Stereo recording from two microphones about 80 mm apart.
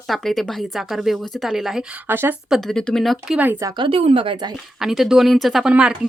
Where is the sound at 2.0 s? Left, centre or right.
Right.